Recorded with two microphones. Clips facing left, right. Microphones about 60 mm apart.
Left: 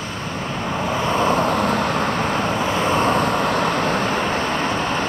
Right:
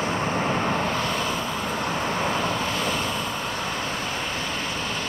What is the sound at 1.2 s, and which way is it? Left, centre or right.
Vehicle, left.